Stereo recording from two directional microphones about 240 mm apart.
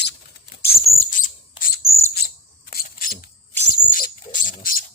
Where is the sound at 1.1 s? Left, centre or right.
Left.